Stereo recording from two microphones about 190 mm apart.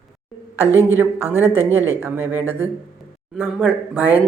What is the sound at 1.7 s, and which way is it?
A man's voice, 10° right (ahead or behind).